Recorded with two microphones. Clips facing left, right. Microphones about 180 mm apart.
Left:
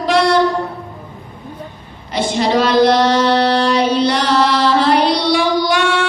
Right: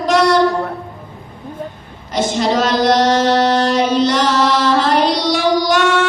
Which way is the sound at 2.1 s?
45° right (ahead or behind).